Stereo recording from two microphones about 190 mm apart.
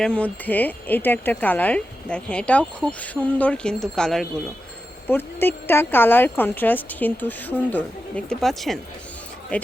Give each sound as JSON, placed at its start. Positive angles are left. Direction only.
{"t": 0.0, "sound": "speech", "side_deg": 5}